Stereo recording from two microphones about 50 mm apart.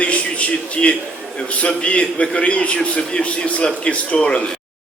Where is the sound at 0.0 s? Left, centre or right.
Left.